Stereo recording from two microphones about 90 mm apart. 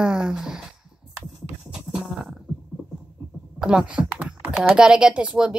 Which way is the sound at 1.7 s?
10° right (ahead or behind).